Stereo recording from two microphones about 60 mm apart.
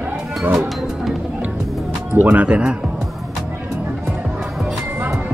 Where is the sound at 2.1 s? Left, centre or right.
Right.